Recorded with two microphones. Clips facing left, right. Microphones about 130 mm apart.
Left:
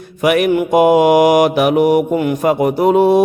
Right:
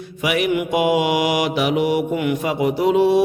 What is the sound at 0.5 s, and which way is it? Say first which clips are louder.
Mantra: left 7 dB; 40° left (ahead or behind).